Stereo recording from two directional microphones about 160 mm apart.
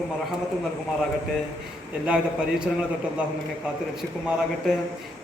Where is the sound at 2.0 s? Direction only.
5° right (ahead or behind).